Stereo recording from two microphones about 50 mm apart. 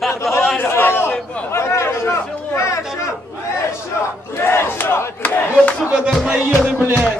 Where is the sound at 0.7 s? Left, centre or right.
Left.